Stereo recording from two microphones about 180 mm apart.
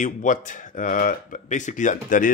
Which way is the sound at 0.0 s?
45° left (ahead or behind).